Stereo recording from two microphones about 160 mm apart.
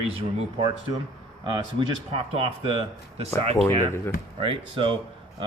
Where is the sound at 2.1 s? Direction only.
35° right (ahead or behind).